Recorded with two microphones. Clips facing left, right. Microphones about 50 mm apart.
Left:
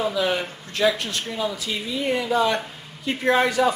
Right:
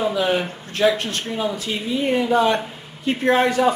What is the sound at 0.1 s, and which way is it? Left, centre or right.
Speech, right.